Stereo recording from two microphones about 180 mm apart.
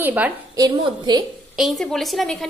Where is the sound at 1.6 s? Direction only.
Centre (ahead or behind).